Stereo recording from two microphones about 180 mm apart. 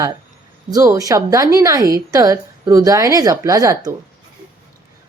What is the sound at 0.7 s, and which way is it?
Speech, 20° right (ahead or behind).